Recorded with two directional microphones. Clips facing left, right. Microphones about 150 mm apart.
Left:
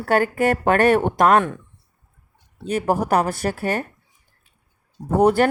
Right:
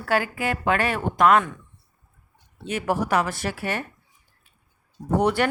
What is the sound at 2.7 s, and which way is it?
A woman's voice, 40° left (ahead or behind).